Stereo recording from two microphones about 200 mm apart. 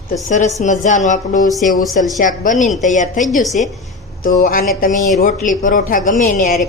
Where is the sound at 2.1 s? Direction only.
40° left (ahead or behind).